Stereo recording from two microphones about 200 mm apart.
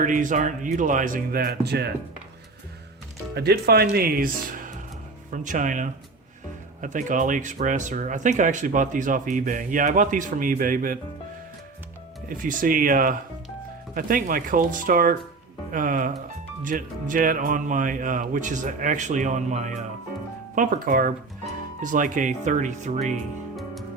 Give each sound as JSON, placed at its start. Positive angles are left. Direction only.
{"t": 0.0, "sound": "speech", "side_deg": -40}
{"t": 3.3, "sound": "speech", "side_deg": -55}
{"t": 12.3, "sound": "speech", "side_deg": -45}